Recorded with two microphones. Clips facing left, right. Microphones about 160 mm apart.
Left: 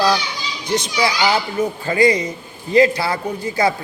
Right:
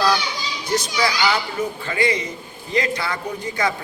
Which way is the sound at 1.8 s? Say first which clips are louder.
Left 8 dB; 35° left (ahead or behind).